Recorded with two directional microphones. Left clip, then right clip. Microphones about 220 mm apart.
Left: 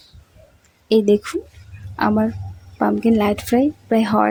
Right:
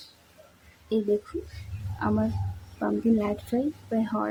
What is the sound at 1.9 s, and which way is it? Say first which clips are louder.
Speech: left 9 dB; 40° left (ahead or behind).